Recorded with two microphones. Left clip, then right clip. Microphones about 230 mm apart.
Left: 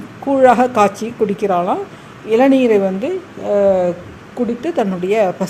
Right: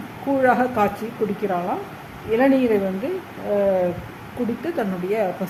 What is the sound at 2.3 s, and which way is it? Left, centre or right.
Speech, left.